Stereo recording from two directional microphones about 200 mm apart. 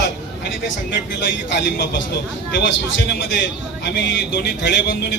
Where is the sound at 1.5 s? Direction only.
60° left (ahead or behind).